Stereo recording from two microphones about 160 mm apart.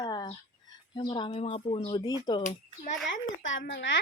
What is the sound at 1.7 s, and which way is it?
Speech, 25° left (ahead or behind).